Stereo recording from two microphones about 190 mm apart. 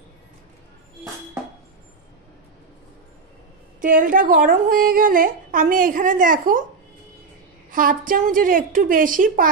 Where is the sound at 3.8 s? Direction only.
45° right (ahead or behind).